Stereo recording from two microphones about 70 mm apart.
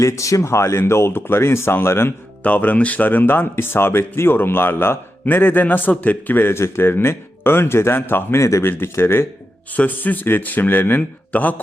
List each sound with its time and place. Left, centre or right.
0.0 s speech: left
2.4 s speech: left
8.4 s speech: left